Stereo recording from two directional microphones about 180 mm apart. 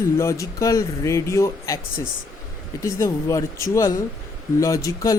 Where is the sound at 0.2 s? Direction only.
15° left (ahead or behind).